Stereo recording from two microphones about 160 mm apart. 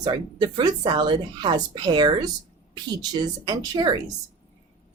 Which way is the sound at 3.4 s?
25° right (ahead or behind).